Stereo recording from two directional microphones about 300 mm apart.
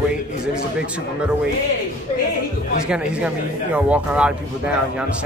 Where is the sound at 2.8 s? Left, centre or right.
Centre.